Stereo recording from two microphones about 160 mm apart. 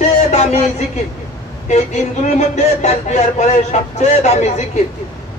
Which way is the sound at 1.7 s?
45° left (ahead or behind).